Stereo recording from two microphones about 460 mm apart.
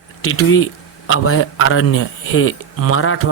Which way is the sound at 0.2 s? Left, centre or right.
Left.